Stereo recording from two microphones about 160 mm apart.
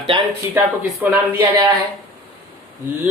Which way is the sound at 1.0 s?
10° right (ahead or behind).